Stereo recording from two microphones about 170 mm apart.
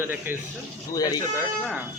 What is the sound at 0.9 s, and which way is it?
Speech, 20° left (ahead or behind).